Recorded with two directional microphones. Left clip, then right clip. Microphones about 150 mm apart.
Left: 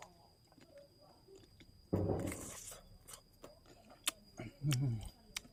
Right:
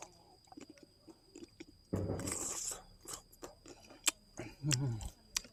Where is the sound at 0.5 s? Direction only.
30° right (ahead or behind).